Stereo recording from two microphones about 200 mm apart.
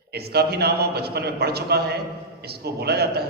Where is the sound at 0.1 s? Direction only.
55° right (ahead or behind).